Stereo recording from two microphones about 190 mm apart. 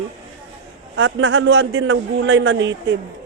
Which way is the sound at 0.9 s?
85° right.